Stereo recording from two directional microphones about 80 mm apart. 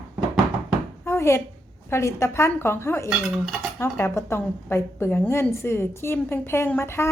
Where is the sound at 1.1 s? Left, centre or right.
Left.